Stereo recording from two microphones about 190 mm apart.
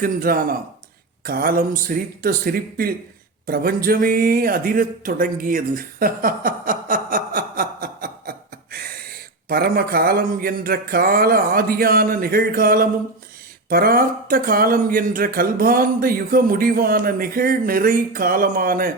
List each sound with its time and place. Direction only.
0.0 s speech: 50° right (ahead or behind)